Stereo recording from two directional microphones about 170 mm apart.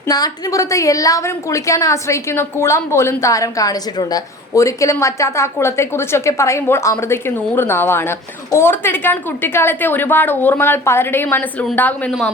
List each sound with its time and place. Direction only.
0.1 s a woman's voice: 20° left (ahead or behind)